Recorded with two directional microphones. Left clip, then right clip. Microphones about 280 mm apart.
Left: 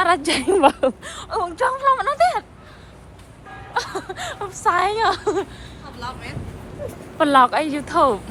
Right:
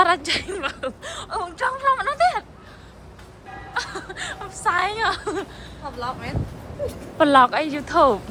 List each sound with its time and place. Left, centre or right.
0.0 s speech: centre
1.0 s a woman's voice: centre
1.4 s a woman's voice: centre
3.8 s speech: centre
7.2 s a woman's voice: centre